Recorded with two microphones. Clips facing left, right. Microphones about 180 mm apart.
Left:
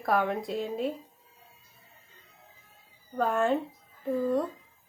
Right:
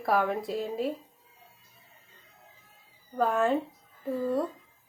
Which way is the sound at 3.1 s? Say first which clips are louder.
Right 1 dB; centre (ahead or behind).